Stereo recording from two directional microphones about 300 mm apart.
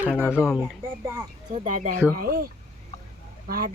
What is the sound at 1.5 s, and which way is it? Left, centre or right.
Speech, right.